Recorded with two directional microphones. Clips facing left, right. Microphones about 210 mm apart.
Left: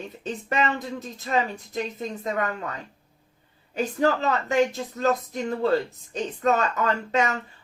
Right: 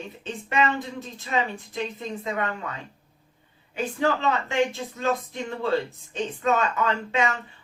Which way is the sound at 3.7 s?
40° left (ahead or behind).